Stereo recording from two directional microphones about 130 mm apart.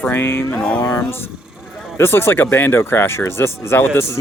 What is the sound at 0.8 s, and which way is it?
Speech, 20° left (ahead or behind).